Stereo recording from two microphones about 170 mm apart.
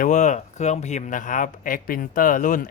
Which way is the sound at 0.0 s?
45° left (ahead or behind).